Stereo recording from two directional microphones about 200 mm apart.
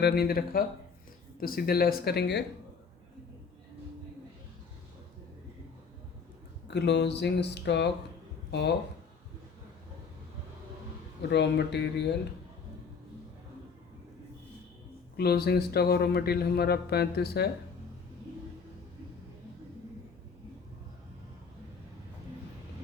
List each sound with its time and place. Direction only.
0.0 s speech: 50° left (ahead or behind)
6.7 s speech: 60° left (ahead or behind)
11.3 s speech: 60° left (ahead or behind)
15.1 s speech: 55° left (ahead or behind)